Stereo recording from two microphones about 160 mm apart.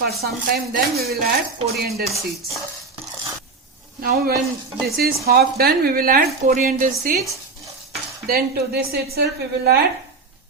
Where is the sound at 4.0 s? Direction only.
75° right (ahead or behind).